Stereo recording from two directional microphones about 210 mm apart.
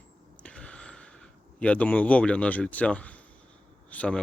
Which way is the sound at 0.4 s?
5° left (ahead or behind).